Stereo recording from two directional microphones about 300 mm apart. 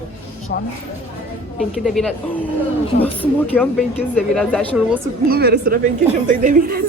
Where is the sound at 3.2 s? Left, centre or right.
Centre.